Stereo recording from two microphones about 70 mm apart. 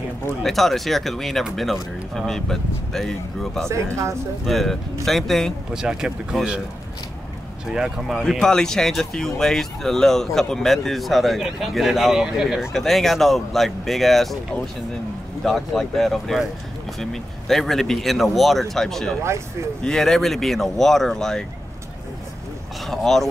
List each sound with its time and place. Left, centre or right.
0.4 s speech: centre
3.6 s speech: right
4.5 s speech: centre
5.7 s speech: centre
7.7 s speech: centre
8.2 s speech: centre
12.7 s speech: centre
15.4 s speech: centre
22.8 s speech: centre